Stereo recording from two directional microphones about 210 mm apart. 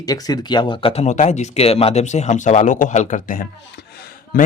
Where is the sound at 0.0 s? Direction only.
20° left (ahead or behind).